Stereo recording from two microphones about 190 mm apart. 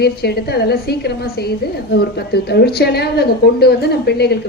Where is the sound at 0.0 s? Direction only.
55° left (ahead or behind).